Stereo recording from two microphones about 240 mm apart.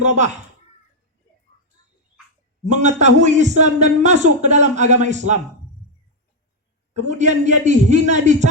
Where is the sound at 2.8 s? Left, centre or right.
Right.